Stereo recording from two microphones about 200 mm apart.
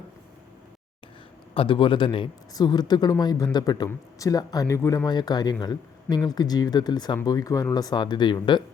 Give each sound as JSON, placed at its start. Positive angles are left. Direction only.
{"t": 1.5, "sound": "speech", "side_deg": 25}